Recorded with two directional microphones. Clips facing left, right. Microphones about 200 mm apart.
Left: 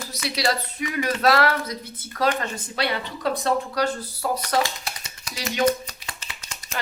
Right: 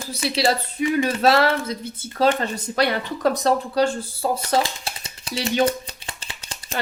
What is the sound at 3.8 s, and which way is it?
Speech, 25° right (ahead or behind).